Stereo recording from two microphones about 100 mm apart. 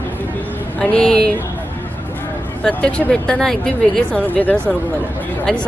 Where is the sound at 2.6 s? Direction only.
10° left (ahead or behind).